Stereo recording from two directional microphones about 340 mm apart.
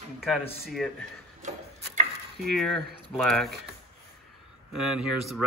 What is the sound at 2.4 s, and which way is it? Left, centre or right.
Speech, centre.